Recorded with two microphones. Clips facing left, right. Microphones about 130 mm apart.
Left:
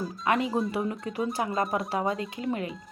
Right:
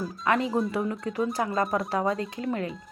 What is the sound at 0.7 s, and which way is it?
Speech, 25° left (ahead or behind).